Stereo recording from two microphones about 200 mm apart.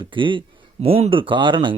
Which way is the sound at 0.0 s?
25° right (ahead or behind).